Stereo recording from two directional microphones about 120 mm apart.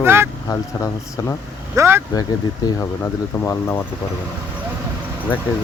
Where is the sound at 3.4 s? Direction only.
20° left (ahead or behind).